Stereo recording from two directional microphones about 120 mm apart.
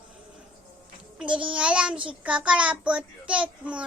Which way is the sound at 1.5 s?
10° right (ahead or behind).